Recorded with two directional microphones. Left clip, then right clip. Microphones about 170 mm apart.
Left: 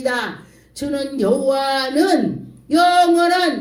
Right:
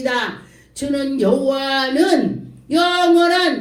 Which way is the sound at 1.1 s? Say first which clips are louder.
Left 1 dB; 40° left (ahead or behind).